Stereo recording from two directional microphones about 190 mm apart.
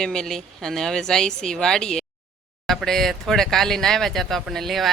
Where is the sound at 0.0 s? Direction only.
5° left (ahead or behind).